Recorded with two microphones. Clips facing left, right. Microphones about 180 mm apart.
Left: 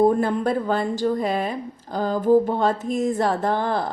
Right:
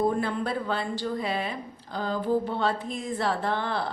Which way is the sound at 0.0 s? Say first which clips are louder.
Left 7 dB; 45° left (ahead or behind).